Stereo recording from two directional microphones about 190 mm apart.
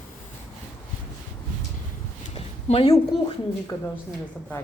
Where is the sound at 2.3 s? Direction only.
30° left (ahead or behind).